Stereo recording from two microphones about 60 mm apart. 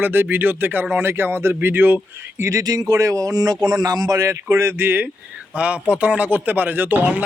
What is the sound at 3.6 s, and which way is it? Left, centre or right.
A man's voice, right.